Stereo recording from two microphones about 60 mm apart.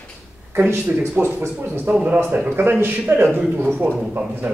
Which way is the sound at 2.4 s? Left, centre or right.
Right.